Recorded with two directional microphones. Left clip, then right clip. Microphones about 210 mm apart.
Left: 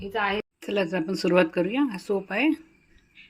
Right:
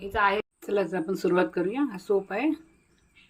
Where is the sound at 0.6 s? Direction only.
15° left (ahead or behind).